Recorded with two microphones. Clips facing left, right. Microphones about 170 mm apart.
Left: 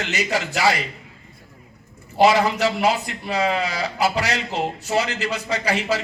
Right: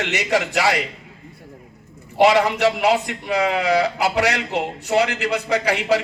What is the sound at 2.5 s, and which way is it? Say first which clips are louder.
Speech: right 3 dB; 70° right (ahead or behind).